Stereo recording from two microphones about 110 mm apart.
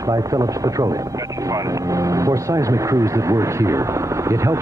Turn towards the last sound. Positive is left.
turn(degrees=-25)  # may be behind; listen again after turning